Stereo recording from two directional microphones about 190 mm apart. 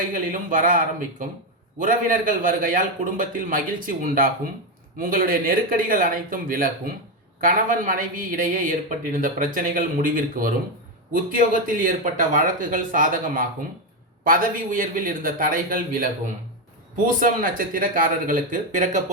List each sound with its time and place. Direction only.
0.1 s a man's voice: 45° right (ahead or behind)
17.1 s a man's voice: 45° right (ahead or behind)